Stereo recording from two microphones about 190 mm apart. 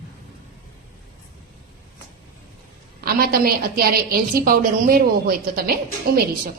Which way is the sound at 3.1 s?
50° right (ahead or behind).